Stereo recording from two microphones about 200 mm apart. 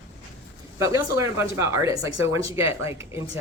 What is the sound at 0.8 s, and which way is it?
Speech, 15° right (ahead or behind).